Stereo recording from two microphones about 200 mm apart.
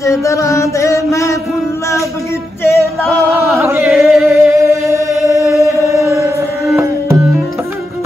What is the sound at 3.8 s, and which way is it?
Chant, centre (ahead or behind).